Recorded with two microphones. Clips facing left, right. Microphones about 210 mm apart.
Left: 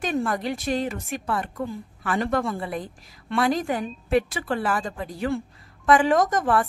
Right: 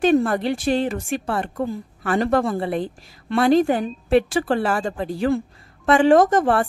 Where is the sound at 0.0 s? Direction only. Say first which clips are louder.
Right 8 dB; 30° right (ahead or behind).